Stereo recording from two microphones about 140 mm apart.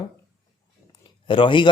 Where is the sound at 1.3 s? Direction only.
35° left (ahead or behind).